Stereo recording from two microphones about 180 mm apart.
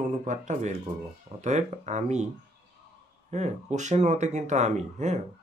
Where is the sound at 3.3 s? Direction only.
40° right (ahead or behind).